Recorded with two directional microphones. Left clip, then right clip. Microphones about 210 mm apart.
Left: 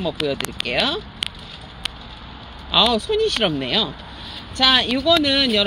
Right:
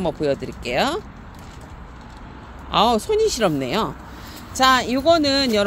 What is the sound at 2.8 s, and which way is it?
Speech, 10° right (ahead or behind).